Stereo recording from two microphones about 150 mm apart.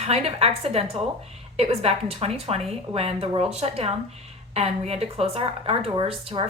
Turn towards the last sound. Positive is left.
turn(degrees=-40)  # may be behind; listen again after turning